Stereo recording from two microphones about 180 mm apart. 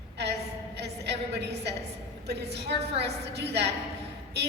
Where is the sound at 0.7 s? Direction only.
70° right (ahead or behind).